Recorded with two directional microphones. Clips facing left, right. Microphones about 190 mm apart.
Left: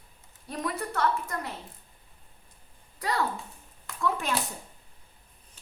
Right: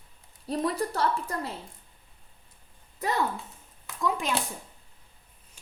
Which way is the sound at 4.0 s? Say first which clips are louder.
Right 1 dB; 15° right (ahead or behind).